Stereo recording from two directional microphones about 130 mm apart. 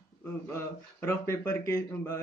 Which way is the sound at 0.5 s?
20° left (ahead or behind).